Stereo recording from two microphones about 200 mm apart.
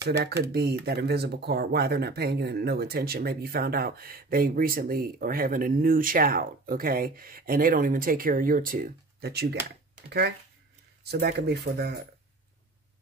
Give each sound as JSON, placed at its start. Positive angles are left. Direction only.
{"t": 0.5, "sound": "speech", "side_deg": -50}